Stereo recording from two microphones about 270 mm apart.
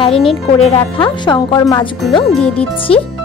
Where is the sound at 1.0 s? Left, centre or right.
Centre.